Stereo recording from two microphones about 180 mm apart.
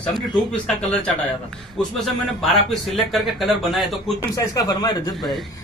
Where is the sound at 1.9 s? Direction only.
Centre (ahead or behind).